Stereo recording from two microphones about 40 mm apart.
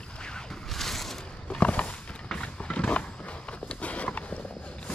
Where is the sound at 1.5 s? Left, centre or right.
Left.